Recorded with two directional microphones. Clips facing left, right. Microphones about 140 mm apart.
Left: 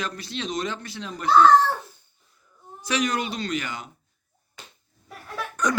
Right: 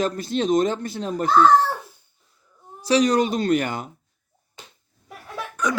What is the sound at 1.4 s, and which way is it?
Speech, 10° right (ahead or behind).